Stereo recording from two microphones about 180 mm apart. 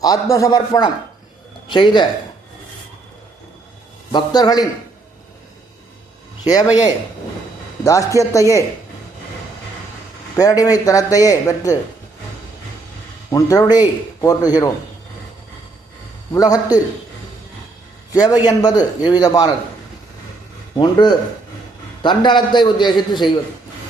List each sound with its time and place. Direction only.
0.0 s a man's voice: 20° left (ahead or behind)
4.1 s a man's voice: 20° left (ahead or behind)
6.5 s a man's voice: 20° left (ahead or behind)
10.3 s a man's voice: 20° left (ahead or behind)
13.3 s a man's voice: 20° left (ahead or behind)
16.3 s a man's voice: 20° left (ahead or behind)
18.1 s a man's voice: 20° left (ahead or behind)
20.7 s a man's voice: 25° left (ahead or behind)